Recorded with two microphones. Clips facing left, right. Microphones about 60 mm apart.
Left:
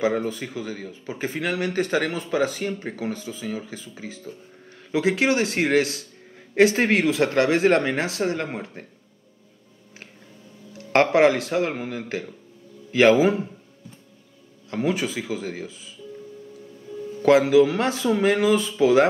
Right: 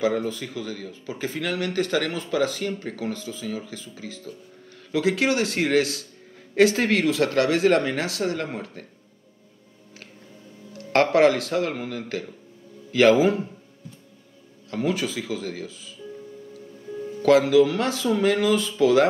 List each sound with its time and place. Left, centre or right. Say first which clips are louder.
0.0 s speech: left 1 dB; left
10.9 s speech: left 1 dB; left
14.7 s speech: left 1 dB; left
17.2 s speech: left 1 dB; left